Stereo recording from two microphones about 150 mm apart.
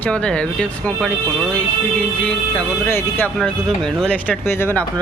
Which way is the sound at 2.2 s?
10° left (ahead or behind).